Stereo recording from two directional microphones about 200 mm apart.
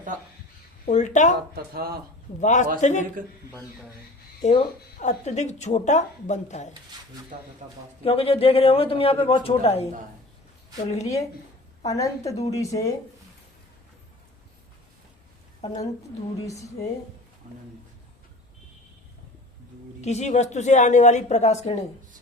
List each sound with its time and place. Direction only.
0.9 s speech: 35° left (ahead or behind)
1.5 s a man's voice: 50° right (ahead or behind)
2.4 s speech: 35° left (ahead or behind)
4.4 s speech: 35° left (ahead or behind)
8.0 s a man's voice: 30° left (ahead or behind)
10.8 s speech: 35° left (ahead or behind)
11.9 s a woman's voice: 15° left (ahead or behind)
15.6 s a man's voice: 20° left (ahead or behind)
17.5 s speech: 40° right (ahead or behind)
20.0 s speech: 35° left (ahead or behind)